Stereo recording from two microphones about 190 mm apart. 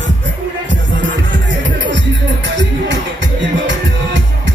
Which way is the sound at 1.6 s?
75° right (ahead or behind).